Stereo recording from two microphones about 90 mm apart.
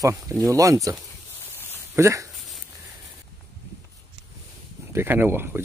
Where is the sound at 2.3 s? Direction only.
Centre (ahead or behind).